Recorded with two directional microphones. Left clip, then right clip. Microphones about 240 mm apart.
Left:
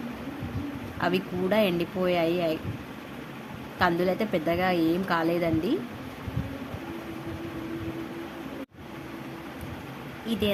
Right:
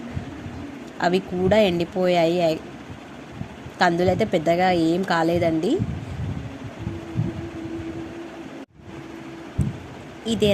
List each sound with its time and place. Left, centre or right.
0.9 s a woman's voice: centre
3.8 s a woman's voice: centre